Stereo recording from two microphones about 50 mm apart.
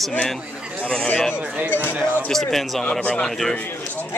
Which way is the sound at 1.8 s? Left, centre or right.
Right.